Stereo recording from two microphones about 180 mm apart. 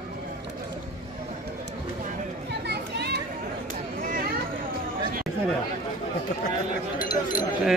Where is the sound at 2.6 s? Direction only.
65° right (ahead or behind).